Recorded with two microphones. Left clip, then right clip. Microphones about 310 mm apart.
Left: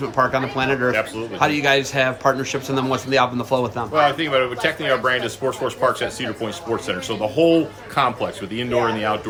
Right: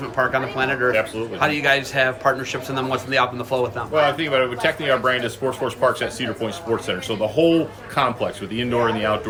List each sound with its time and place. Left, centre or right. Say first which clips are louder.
0.0 s a man's voice: left 2 dB; centre
3.9 s speech: left 1 dB; centre